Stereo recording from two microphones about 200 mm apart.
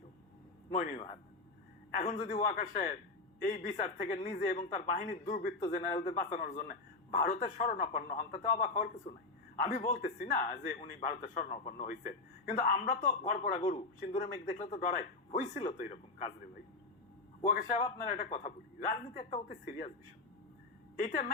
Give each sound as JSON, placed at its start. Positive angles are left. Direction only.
{"t": 0.7, "sound": "speech", "side_deg": 40}
{"t": 2.2, "sound": "speech", "side_deg": 35}
{"t": 17.4, "sound": "speech", "side_deg": 35}
{"t": 20.9, "sound": "speech", "side_deg": 40}